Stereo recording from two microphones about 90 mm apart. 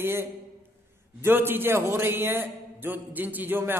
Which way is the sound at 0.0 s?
25° right (ahead or behind).